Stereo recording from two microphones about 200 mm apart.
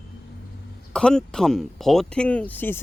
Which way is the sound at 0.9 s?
5° left (ahead or behind).